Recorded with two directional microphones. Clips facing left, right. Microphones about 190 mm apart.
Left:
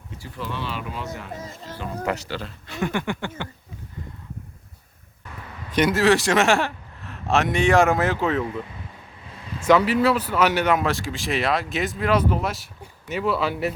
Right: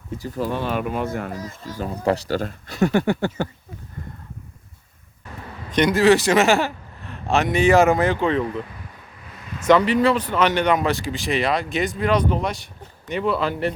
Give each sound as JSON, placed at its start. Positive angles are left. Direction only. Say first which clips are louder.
{"t": 0.2, "sound": "speech", "louder": "right 6 dB", "side_deg": -40}
{"t": 1.8, "sound": "speech", "louder": "right 5 dB", "side_deg": -35}
{"t": 5.7, "sound": "speech", "louder": "right 3 dB", "side_deg": 5}
{"t": 9.6, "sound": "speech", "louder": "right 2 dB", "side_deg": 5}